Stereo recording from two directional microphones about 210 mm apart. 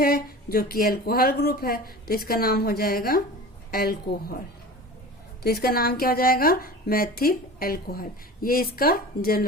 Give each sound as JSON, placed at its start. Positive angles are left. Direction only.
{"t": 0.0, "sound": "speech", "side_deg": 45}